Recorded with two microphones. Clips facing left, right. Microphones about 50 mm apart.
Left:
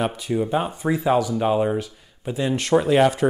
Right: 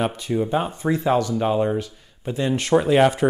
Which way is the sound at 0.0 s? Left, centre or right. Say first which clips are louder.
Even; centre.